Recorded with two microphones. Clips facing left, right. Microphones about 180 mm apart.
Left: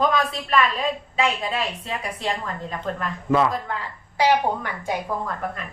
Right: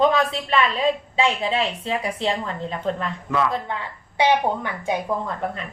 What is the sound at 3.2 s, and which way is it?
Speech, 30° left (ahead or behind).